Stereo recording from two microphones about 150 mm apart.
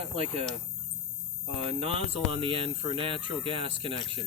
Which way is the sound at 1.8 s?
40° right (ahead or behind).